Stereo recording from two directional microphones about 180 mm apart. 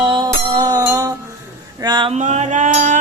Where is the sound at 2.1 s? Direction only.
40° right (ahead or behind).